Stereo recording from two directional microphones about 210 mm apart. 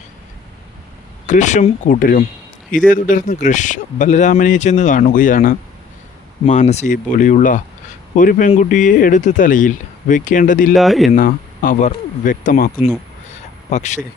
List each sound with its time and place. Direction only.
1.3 s speech: 35° left (ahead or behind)
10.8 s speech: centre (ahead or behind)
11.1 s speech: 40° left (ahead or behind)
13.3 s a sound: 35° left (ahead or behind)